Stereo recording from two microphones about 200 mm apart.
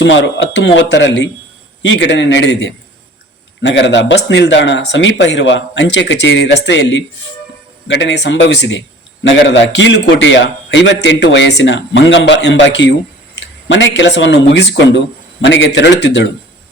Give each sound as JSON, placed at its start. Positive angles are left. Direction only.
{"t": 0.0, "sound": "a man's voice", "side_deg": 65}